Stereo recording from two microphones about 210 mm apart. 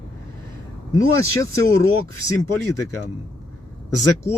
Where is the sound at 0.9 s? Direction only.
15° left (ahead or behind).